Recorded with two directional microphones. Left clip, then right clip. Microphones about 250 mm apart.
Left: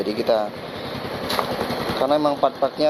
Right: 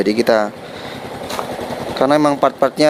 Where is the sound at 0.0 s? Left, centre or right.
Right.